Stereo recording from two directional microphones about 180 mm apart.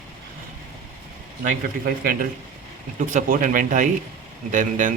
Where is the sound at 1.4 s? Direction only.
55° right (ahead or behind).